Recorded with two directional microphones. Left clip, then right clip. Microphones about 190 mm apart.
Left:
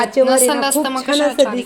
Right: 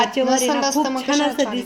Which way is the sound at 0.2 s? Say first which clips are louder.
Left 7 dB; 10° left (ahead or behind).